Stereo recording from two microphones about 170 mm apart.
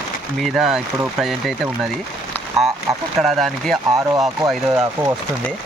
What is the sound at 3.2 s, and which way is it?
Speech, centre (ahead or behind).